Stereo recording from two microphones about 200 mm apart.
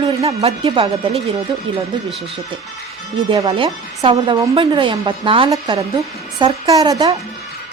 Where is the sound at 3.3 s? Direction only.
25° right (ahead or behind).